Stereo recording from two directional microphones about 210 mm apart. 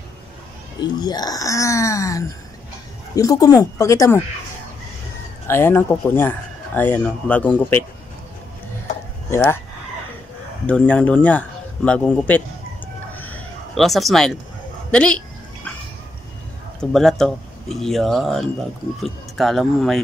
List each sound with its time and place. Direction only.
0.7 s speech: 20° left (ahead or behind)
5.5 s speech: 10° left (ahead or behind)
9.3 s speech: 10° left (ahead or behind)
10.7 s speech: 5° left (ahead or behind)
13.1 s a sound: 10° left (ahead or behind)
14.9 s a woman's voice: 5° left (ahead or behind)
16.9 s speech: centre (ahead or behind)